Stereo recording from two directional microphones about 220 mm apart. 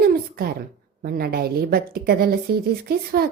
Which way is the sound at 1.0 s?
45° right (ahead or behind).